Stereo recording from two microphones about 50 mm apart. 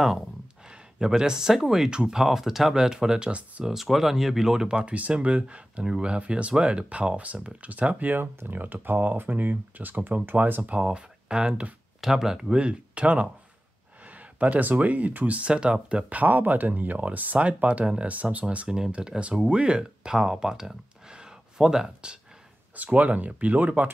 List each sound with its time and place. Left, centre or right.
0.7 s speech: centre
3.3 s speech: right
3.6 s speech: centre; by 8.1 s right
8.1 s speech: right
10.8 s speech: centre
12.0 s speech: centre
12.5 s speech: right
14.0 s a sound: right
14.7 s speech: right
16.1 s speech: right; by 21.9 s centre
22.8 s speech: right